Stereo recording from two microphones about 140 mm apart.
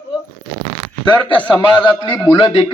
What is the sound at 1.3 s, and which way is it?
Speech, 35° left (ahead or behind).